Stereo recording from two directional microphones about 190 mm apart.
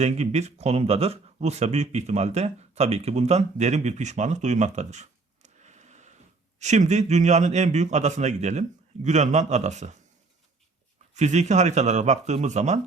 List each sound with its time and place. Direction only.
0.0 s a man's voice: 35° right (ahead or behind)
11.1 s a man's voice: 40° right (ahead or behind)